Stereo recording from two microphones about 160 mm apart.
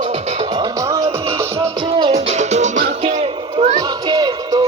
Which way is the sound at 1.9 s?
35° right (ahead or behind).